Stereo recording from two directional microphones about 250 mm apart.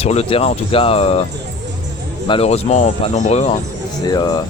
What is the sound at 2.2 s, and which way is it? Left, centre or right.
Speech, left.